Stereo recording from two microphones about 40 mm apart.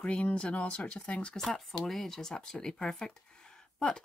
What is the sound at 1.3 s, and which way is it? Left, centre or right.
Speech, centre.